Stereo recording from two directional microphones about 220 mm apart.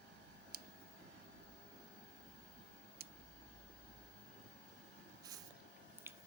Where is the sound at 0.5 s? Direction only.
45° right (ahead or behind).